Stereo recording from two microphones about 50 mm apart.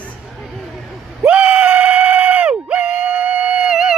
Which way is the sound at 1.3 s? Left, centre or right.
Right.